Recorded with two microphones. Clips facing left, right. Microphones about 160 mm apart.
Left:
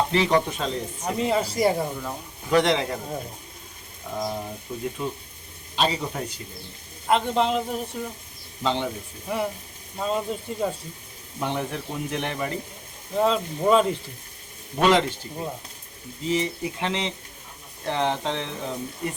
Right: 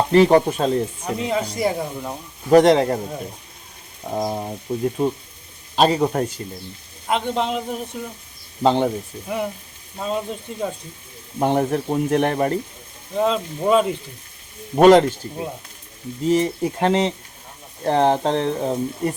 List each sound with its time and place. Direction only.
0.1 s speech: 45° right (ahead or behind)
1.0 s speech: centre (ahead or behind)
2.5 s speech: 45° right (ahead or behind)
4.0 s speech: 45° right (ahead or behind)
7.1 s speech: centre (ahead or behind)
8.6 s speech: 45° right (ahead or behind)
9.2 s speech: centre (ahead or behind)
11.3 s speech: 50° right (ahead or behind)
13.1 s speech: centre (ahead or behind)
14.8 s speech: 45° right (ahead or behind)
16.2 s speech: 45° right (ahead or behind)